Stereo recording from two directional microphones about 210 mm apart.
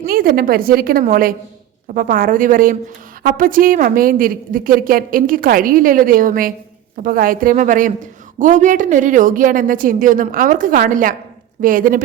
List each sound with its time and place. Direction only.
0.0 s a woman's voice: 45° right (ahead or behind)